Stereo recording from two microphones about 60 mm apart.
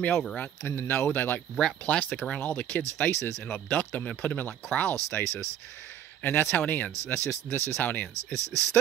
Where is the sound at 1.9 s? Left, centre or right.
Left.